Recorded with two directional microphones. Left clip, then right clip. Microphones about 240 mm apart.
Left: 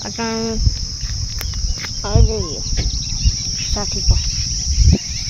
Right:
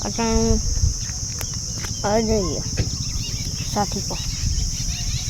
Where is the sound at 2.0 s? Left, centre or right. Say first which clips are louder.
Right 3 dB; right.